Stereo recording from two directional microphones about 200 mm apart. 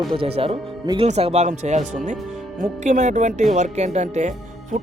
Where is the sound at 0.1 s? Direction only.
25° right (ahead or behind).